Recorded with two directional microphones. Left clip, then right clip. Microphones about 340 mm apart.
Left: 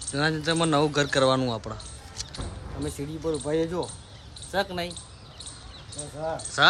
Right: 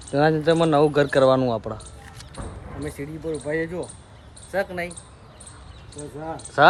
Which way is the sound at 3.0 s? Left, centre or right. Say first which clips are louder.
Left 1 dB; centre.